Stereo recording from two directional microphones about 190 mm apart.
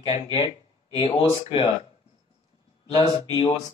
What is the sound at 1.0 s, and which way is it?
Speech, 30° left (ahead or behind).